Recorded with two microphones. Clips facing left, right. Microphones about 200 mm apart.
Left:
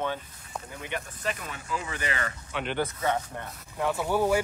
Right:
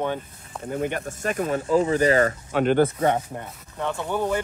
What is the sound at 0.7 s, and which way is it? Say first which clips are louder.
Speech: right 12 dB; 50° right (ahead or behind).